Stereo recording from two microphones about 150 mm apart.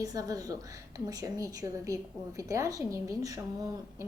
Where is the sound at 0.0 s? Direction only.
25° right (ahead or behind).